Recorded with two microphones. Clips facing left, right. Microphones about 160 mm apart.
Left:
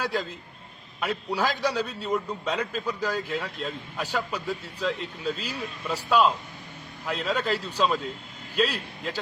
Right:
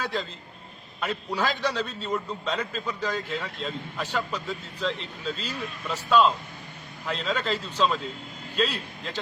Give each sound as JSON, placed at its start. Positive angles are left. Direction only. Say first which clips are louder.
{"t": 0.0, "sound": "a man's voice", "louder": "left 2 dB", "side_deg": 10}